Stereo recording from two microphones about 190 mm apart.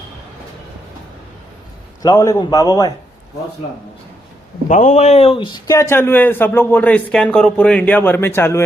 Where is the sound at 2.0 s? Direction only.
20° left (ahead or behind).